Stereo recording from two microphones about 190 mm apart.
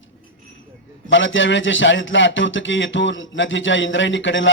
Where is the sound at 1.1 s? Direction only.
80° left.